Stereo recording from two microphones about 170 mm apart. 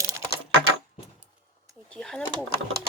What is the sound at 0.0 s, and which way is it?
Typing, 20° right (ahead or behind).